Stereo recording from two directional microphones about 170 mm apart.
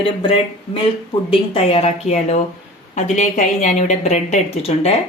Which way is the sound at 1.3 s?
35° left (ahead or behind).